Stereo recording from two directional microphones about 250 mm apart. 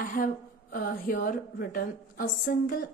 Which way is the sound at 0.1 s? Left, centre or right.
Left.